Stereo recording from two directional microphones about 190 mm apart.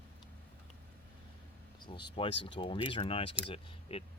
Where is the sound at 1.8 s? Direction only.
25° left (ahead or behind).